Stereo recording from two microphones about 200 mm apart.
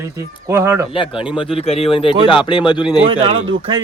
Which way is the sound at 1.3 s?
25° left (ahead or behind).